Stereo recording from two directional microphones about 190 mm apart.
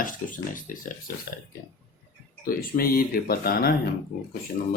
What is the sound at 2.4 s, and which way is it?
Speech, 50° left (ahead or behind).